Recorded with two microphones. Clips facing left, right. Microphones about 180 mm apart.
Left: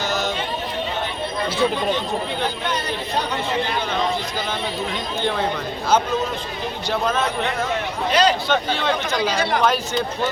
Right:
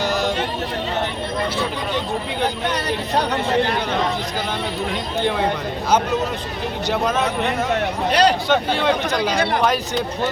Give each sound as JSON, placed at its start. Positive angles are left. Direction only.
{"t": 8.1, "sound": "speech", "side_deg": -65}
{"t": 8.4, "sound": "speech", "side_deg": -15}